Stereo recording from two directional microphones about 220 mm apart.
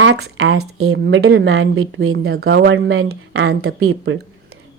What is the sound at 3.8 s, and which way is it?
Speech, 70° right (ahead or behind).